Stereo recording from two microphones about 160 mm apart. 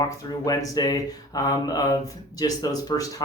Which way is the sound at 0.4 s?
25° left (ahead or behind).